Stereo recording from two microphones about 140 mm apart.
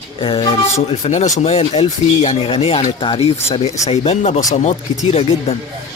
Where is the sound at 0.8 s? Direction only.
50° left (ahead or behind).